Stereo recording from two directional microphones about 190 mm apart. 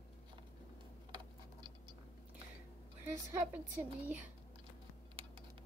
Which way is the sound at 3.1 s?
10° right (ahead or behind).